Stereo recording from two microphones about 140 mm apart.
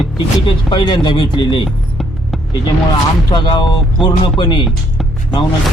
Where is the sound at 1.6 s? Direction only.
Centre (ahead or behind).